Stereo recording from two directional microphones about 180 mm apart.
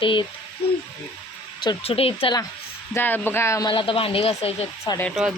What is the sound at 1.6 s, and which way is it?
Speech, 30° left (ahead or behind).